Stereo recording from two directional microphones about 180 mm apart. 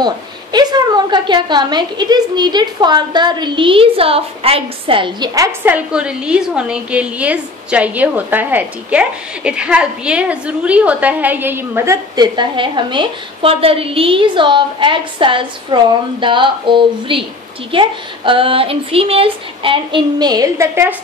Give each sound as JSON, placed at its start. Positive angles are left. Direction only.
{"t": 0.0, "sound": "a woman's voice", "side_deg": -25}